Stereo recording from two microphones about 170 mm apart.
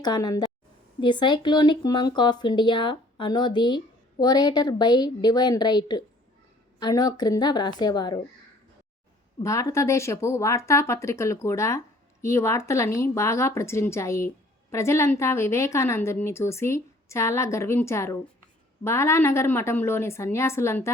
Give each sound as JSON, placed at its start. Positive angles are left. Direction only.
{"t": 0.0, "sound": "a woman's voice", "side_deg": 20}
{"t": 9.4, "sound": "a woman's voice", "side_deg": 20}